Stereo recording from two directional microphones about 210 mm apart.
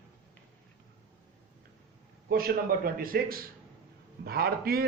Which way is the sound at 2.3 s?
45° right (ahead or behind).